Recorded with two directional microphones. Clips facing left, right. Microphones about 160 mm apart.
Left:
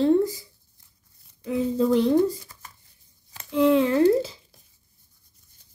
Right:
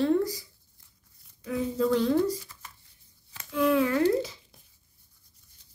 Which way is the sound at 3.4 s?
25° left (ahead or behind).